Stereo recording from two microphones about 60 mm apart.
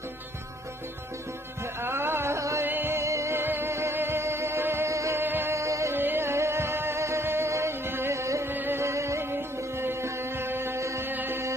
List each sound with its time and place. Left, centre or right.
1.8 s a sound: right
2.6 s music: right
3.0 s music: right
3.3 s music: right
4.8 s music: right
5.2 s music: right
5.6 s music: right
5.9 s music: right
8.5 s music: right
11.0 s music: right